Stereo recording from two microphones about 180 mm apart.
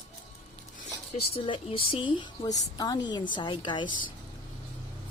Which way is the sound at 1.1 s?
30° left (ahead or behind).